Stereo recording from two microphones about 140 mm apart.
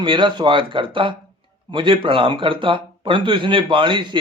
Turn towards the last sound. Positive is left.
turn(degrees=-35)  # may be behind; listen again after turning